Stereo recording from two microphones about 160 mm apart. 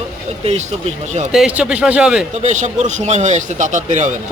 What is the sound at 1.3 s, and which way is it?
Speech, 5° right (ahead or behind).